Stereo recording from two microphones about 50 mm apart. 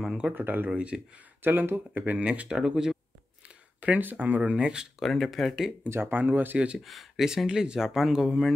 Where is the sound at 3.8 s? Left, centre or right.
Right.